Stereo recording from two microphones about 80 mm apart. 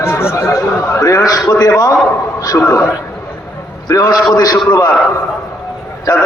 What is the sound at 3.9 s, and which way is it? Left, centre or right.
Speech, left.